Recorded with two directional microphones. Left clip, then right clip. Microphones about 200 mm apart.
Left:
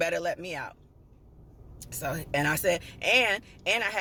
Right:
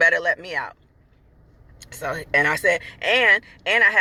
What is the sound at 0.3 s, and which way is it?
Speech, 25° left (ahead or behind).